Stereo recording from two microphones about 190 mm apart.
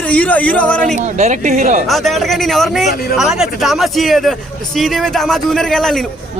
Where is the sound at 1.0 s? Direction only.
40° right (ahead or behind).